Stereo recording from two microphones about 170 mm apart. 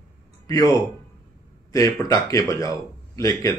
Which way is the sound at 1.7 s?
20° left (ahead or behind).